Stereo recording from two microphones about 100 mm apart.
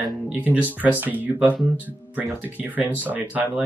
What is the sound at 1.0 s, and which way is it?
Speech, 15° right (ahead or behind).